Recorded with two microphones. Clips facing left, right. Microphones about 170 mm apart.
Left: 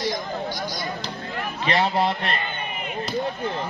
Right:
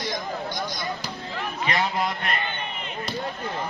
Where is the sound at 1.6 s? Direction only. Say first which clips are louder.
Left 4 dB; 30° left (ahead or behind).